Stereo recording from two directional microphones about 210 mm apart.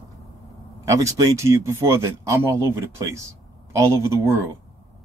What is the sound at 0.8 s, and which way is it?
Speech, 15° right (ahead or behind).